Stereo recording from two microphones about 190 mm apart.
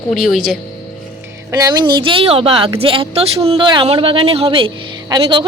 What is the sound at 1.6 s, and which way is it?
A woman's voice, 25° right (ahead or behind).